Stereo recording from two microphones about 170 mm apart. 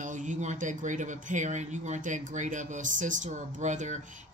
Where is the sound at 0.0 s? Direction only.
45° right (ahead or behind).